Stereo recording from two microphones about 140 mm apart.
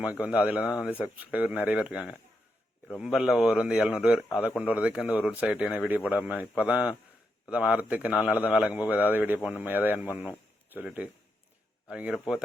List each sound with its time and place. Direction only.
0.0 s a man's voice: 10° right (ahead or behind)
0.9 s speech: 15° left (ahead or behind)
1.2 s a man's voice: 10° right (ahead or behind)
11.9 s speech: 5° right (ahead or behind)